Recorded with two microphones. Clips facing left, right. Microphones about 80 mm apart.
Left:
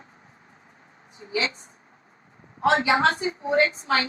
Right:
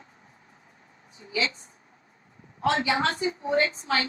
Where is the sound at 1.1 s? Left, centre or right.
Left.